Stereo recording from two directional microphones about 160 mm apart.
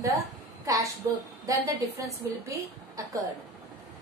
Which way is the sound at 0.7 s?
20° right (ahead or behind).